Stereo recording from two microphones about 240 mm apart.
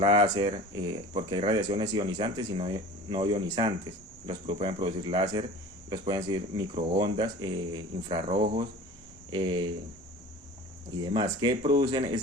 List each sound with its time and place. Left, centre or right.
0.0 s speech: centre
11.0 s speech: centre